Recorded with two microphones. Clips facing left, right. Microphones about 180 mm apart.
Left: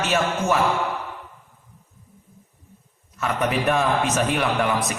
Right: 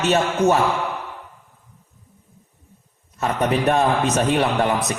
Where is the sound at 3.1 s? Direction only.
35° right (ahead or behind).